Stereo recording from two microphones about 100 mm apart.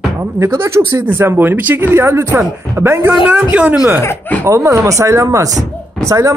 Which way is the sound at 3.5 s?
10° right (ahead or behind).